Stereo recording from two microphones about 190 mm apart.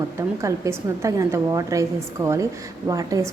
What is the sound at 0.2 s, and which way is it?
A woman's voice, 15° right (ahead or behind).